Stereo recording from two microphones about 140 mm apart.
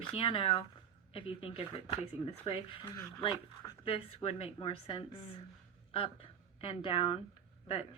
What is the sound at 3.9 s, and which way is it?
Speech, 40° left (ahead or behind).